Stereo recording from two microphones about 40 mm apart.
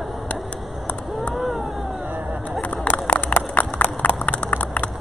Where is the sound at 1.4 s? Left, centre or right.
Centre.